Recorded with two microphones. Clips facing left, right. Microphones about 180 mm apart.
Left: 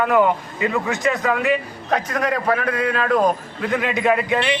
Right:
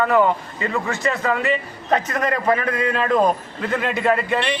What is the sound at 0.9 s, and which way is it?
Speech, 15° left (ahead or behind).